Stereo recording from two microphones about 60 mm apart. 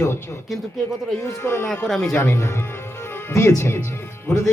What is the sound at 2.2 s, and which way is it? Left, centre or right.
Speech, left.